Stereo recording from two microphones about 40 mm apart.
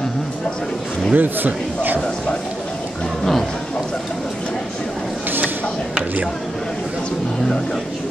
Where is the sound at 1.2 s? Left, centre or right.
Right.